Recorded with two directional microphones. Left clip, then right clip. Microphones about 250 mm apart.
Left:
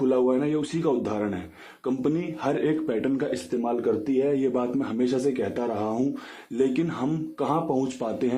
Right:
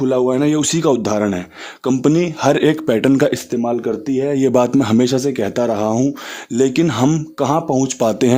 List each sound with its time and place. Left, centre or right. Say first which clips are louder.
0.0 s speech: right 7 dB; right